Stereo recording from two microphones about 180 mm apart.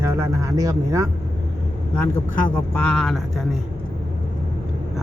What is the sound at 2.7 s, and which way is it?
Speech, 5° left (ahead or behind).